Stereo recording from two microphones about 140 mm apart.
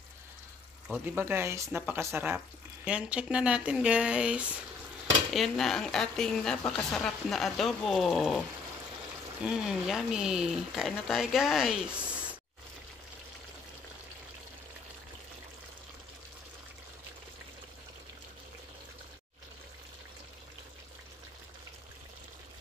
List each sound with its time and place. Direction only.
0.8 s speech: 10° right (ahead or behind)
2.3 s a woman's voice: 5° right (ahead or behind)